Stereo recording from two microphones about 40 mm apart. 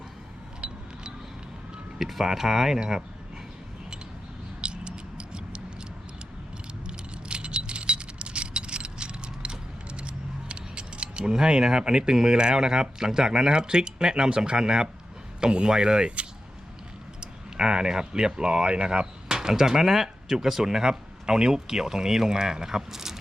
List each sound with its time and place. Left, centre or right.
2.0 s speech: centre
4.6 s tick-tock: right
6.8 s keys jangling: right
15.4 s speech: right